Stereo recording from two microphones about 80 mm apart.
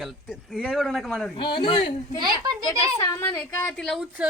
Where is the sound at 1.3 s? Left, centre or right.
Left.